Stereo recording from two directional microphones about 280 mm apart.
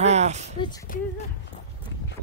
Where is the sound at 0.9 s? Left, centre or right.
Left.